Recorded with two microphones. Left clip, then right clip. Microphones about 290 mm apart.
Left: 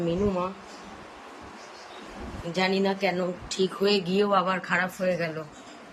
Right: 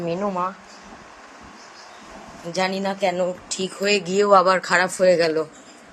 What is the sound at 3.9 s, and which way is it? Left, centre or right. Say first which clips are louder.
Speech: right 11 dB; centre.